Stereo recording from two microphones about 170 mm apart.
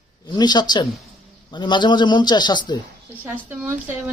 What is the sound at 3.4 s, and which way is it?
Speech, 15° right (ahead or behind).